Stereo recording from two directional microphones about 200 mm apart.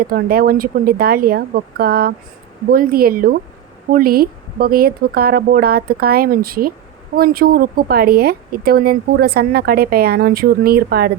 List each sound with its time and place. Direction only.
0.0 s speech: 50° right (ahead or behind)